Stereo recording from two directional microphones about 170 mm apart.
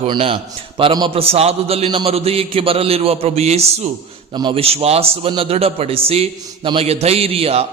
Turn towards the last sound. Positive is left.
turn(degrees=-35)  # may be behind; listen again after turning